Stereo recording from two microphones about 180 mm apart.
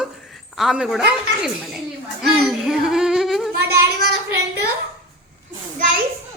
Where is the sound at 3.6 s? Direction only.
65° right (ahead or behind).